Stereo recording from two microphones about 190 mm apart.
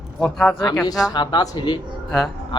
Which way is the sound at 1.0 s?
25° left (ahead or behind).